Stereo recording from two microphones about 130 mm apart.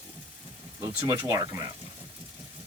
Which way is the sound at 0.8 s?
25° right (ahead or behind).